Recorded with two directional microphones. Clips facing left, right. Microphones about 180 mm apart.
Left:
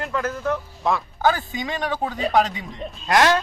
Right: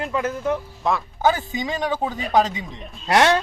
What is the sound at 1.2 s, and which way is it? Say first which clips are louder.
Speech: right 1 dB; 20° right (ahead or behind).